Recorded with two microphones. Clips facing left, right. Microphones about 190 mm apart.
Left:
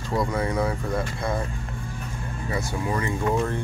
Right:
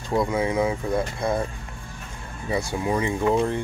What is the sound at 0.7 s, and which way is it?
Speech, 20° right (ahead or behind).